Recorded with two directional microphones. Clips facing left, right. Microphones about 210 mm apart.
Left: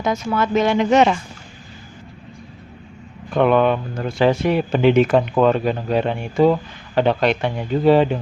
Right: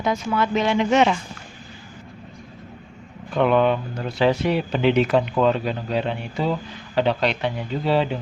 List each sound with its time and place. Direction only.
0.0 s speech: 45° left (ahead or behind)
3.3 s speech: 55° left (ahead or behind)